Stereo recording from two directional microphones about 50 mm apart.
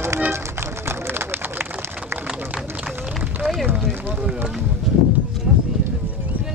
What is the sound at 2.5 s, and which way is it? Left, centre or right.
Run, centre.